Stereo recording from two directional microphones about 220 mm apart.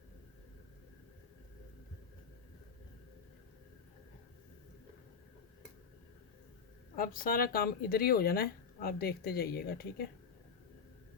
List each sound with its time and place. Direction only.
6.9 s speech: 40° left (ahead or behind)